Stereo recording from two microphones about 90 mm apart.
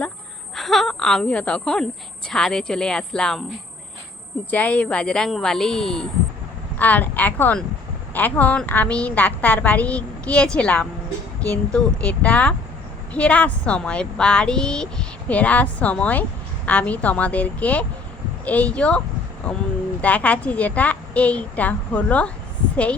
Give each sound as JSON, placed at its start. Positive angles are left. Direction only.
{"t": 0.5, "sound": "a woman's voice", "side_deg": 0}
{"t": 4.5, "sound": "a woman's voice", "side_deg": 15}
{"t": 6.7, "sound": "a woman's voice", "side_deg": 20}